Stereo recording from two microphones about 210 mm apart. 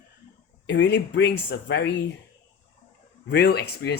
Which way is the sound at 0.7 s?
55° left (ahead or behind).